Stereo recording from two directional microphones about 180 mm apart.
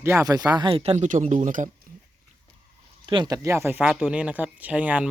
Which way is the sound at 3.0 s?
25° right (ahead or behind).